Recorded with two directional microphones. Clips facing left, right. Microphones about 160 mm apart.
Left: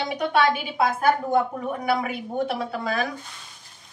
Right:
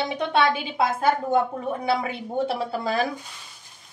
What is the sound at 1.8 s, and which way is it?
A woman's voice, 25° right (ahead or behind).